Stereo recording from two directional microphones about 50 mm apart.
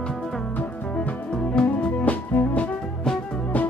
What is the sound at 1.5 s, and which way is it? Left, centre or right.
Music, centre.